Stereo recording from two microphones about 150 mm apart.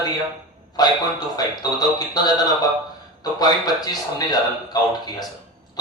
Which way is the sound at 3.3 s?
25° left (ahead or behind).